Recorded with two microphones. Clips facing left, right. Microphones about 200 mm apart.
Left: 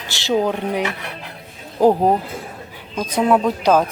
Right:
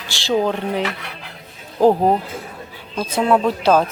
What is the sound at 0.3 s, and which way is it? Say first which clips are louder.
Speech: even; 15° left (ahead or behind).